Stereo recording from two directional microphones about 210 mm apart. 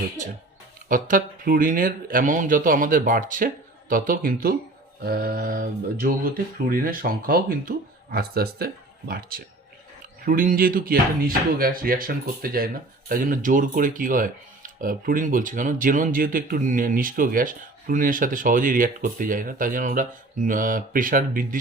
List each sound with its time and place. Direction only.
0.9 s speech: 40° right (ahead or behind)